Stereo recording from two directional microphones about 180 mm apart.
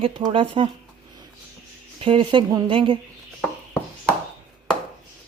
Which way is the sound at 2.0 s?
30° right (ahead or behind).